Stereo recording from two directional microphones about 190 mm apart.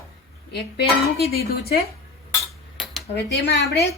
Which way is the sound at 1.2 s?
55° left (ahead or behind).